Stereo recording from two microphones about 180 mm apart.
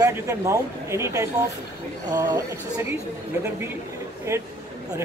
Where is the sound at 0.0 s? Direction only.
15° right (ahead or behind).